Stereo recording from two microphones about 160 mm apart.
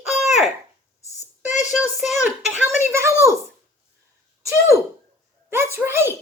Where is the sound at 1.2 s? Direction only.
45° left (ahead or behind).